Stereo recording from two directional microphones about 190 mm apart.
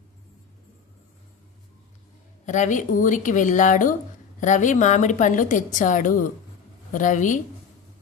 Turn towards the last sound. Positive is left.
turn(degrees=40)  # may be behind; listen again after turning